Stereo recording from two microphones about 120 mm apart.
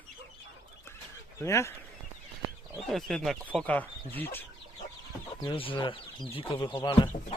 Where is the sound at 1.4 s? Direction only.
20° left (ahead or behind).